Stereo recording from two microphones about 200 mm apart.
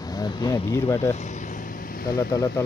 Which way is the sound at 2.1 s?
20° left (ahead or behind).